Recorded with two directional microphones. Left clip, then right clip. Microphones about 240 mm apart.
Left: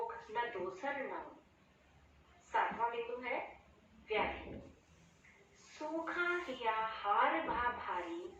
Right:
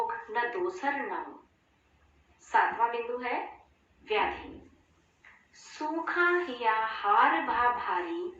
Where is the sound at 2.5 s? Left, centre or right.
Right.